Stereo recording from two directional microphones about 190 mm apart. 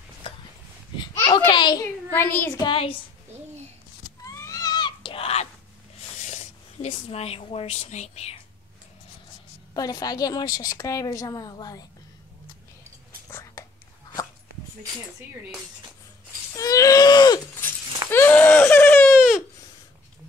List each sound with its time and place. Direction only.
1.1 s a child's voice: 15° left (ahead or behind)
2.6 s a woman's voice: 30° left (ahead or behind)
4.2 s cat: 20° left (ahead or behind)
6.1 s speech: 40° left (ahead or behind)
9.8 s a woman's voice: 20° left (ahead or behind)
13.3 s a sound: 15° left (ahead or behind)
16.5 s a woman's voice: 15° left (ahead or behind)
18.1 s a sound: 10° left (ahead or behind)
19.1 s a sound: 5° right (ahead or behind)